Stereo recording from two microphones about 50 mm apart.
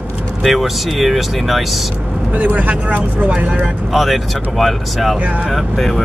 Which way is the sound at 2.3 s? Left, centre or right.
Right.